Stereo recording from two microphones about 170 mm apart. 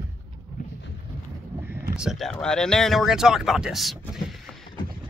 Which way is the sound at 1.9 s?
Centre (ahead or behind).